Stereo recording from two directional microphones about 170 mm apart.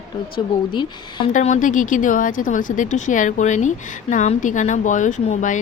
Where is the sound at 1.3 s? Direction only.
45° left (ahead or behind).